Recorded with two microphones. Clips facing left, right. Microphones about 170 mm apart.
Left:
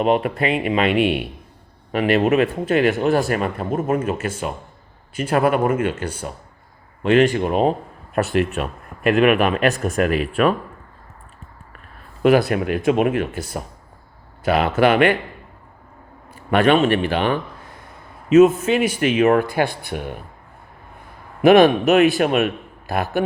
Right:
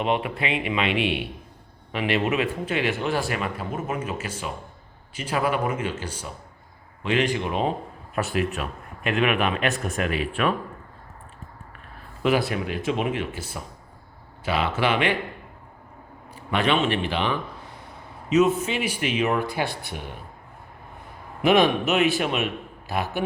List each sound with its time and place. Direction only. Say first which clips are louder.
0.0 s a man's voice: left 7 dB; 45° left (ahead or behind)
12.2 s speech: left 7 dB; 55° left (ahead or behind)
16.3 s a man's voice: left 7 dB; 50° left (ahead or behind)
21.4 s speech: left 7 dB; 55° left (ahead or behind)